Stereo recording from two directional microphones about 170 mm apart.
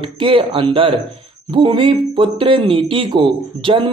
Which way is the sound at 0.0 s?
30° right (ahead or behind).